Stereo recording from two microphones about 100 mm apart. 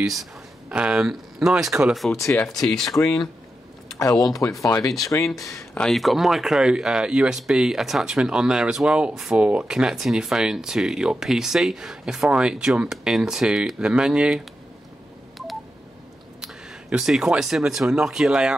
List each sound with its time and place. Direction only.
0.0 s speech: centre (ahead or behind)
2.7 s speech: 5° left (ahead or behind)
4.0 s speech: 35° left (ahead or behind)
5.8 s speech: centre (ahead or behind)
16.9 s speech: 5° right (ahead or behind)